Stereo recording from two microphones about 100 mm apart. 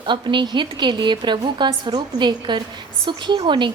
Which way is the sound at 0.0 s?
50° right (ahead or behind).